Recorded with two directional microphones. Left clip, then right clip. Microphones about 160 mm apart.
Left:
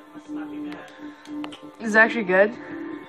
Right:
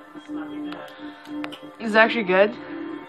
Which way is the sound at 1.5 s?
5° left (ahead or behind).